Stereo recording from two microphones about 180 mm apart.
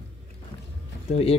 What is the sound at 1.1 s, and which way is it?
Speech, 35° left (ahead or behind).